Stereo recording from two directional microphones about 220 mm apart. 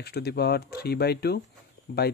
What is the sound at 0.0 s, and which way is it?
Speech, 45° left (ahead or behind).